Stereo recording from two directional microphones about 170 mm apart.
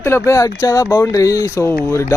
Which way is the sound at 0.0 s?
15° left (ahead or behind).